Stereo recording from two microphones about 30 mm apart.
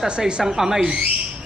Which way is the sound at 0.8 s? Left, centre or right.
Right.